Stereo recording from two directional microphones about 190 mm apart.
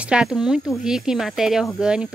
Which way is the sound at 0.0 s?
5° right (ahead or behind).